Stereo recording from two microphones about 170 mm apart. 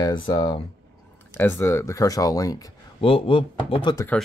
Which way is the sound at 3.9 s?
15° left (ahead or behind).